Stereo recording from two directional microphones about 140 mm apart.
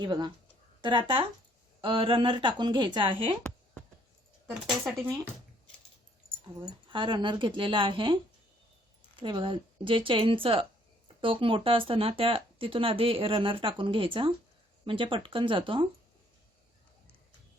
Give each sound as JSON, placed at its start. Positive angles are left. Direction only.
{"t": 0.0, "sound": "speech", "side_deg": -35}
{"t": 6.6, "sound": "speech", "side_deg": -35}